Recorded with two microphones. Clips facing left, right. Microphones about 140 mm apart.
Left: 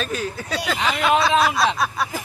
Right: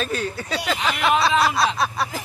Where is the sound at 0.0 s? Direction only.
Centre (ahead or behind).